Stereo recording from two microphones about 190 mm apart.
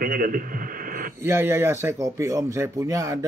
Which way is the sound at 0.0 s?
50° right (ahead or behind).